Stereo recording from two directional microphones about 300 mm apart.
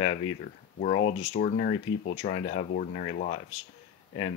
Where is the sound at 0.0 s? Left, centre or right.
Left.